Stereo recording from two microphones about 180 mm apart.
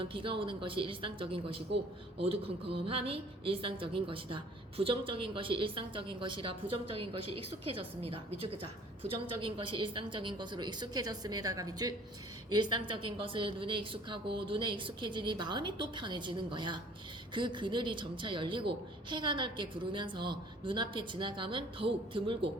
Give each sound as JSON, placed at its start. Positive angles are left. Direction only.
{"t": 0.0, "sound": "a woman's voice", "side_deg": -30}